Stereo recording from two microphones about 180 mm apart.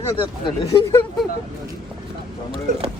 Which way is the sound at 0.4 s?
15° left (ahead or behind).